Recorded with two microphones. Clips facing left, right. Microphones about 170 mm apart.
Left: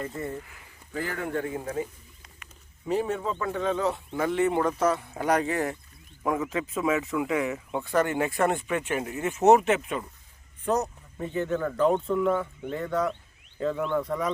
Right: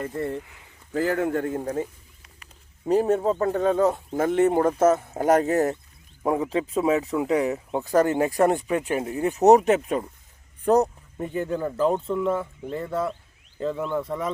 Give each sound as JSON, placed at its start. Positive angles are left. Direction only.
{"t": 0.0, "sound": "speech", "side_deg": -65}
{"t": 0.3, "sound": "speech", "side_deg": -20}
{"t": 1.0, "sound": "speech", "side_deg": -45}
{"t": 11.2, "sound": "speech", "side_deg": -35}
{"t": 11.8, "sound": "speech", "side_deg": -5}